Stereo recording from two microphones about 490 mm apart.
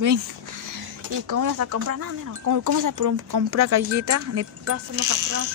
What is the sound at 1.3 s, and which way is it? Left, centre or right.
Speech, right.